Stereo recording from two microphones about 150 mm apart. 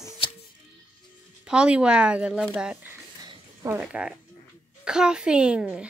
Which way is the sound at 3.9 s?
5° right (ahead or behind).